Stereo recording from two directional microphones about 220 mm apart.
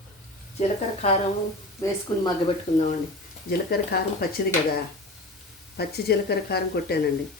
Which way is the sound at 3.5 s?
45° left (ahead or behind).